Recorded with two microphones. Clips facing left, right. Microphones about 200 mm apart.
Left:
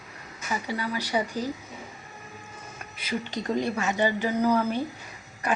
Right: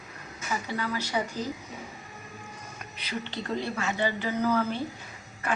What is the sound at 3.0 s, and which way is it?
A woman's voice, 15° left (ahead or behind).